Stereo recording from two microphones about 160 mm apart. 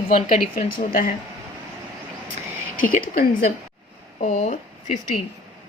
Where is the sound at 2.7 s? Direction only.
60° left (ahead or behind).